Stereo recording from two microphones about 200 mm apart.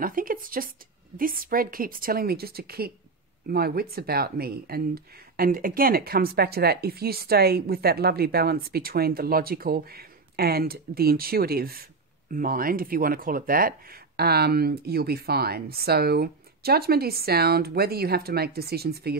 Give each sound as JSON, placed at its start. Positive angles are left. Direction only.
{"t": 0.0, "sound": "speech", "side_deg": -45}